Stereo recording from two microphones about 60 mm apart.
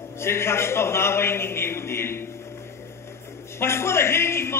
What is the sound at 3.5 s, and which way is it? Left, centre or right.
A man's voice, left.